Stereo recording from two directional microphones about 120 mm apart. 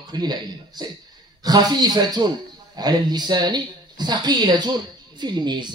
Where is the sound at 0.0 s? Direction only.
35° right (ahead or behind).